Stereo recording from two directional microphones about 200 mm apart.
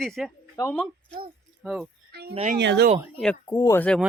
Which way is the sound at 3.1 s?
5° left (ahead or behind).